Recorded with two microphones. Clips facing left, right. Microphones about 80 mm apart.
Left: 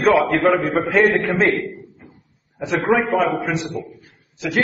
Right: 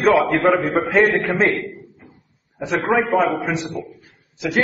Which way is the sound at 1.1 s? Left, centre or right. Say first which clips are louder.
Left 1 dB; centre.